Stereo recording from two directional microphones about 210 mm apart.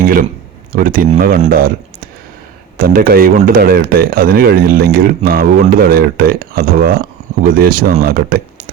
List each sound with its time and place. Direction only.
0.7 s speech: 40° right (ahead or behind)